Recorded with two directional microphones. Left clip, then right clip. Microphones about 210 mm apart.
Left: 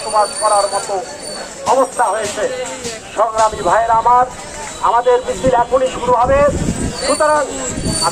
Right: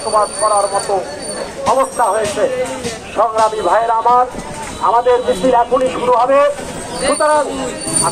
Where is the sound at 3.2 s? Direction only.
35° right (ahead or behind).